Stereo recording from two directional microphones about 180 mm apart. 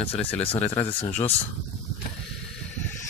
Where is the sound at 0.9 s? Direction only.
35° left (ahead or behind).